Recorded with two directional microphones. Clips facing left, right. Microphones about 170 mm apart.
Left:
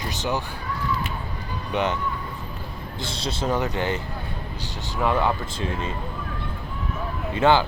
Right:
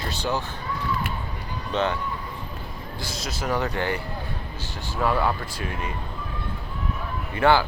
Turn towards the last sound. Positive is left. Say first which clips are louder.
# left 1 dB
turn(degrees=20)  # may be behind; listen again after turning